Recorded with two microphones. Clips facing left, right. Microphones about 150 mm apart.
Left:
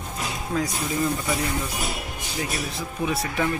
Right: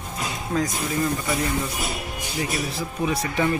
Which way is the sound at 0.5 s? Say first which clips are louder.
Right 2 dB; centre (ahead or behind).